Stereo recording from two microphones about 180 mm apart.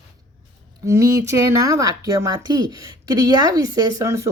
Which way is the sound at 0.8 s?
15° right (ahead or behind).